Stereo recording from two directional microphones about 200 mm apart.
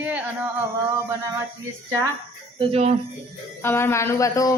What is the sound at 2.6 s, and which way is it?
Speech, 30° right (ahead or behind).